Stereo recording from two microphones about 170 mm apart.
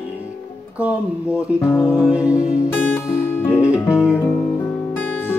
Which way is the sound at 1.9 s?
5° right (ahead or behind).